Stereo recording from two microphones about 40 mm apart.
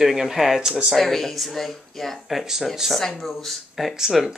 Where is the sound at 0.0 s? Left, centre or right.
Centre.